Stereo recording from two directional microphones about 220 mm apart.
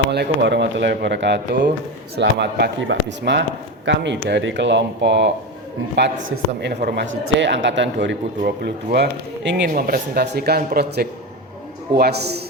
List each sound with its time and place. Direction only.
0.1 s a man's voice: 50° right (ahead or behind)